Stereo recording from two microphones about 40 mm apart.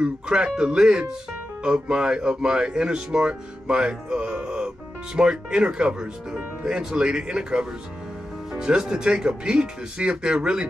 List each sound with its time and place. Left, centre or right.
0.0 s speech: right